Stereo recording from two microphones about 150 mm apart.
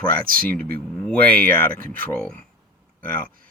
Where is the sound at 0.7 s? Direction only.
10° left (ahead or behind).